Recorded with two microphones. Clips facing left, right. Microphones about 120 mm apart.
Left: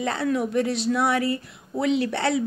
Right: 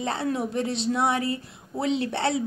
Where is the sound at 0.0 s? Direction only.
25° right (ahead or behind).